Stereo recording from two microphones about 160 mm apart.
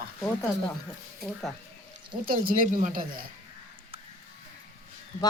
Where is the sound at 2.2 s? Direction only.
65° right (ahead or behind).